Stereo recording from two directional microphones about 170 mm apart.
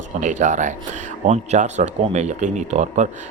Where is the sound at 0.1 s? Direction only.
45° right (ahead or behind).